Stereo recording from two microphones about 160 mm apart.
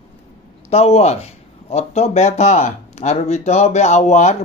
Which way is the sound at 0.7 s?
40° left (ahead or behind).